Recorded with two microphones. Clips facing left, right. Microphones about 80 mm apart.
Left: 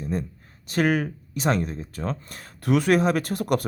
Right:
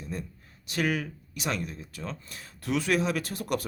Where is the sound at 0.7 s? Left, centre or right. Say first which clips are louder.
Left 7 dB; left.